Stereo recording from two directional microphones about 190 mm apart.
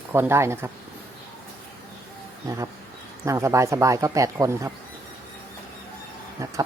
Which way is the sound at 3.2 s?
15° right (ahead or behind).